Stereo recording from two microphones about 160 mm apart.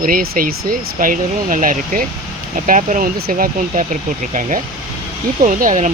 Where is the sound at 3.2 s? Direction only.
60° right (ahead or behind).